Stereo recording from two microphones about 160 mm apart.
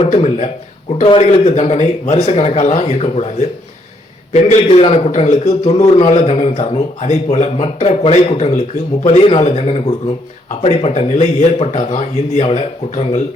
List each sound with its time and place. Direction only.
0.0 s a man's voice: 40° left (ahead or behind)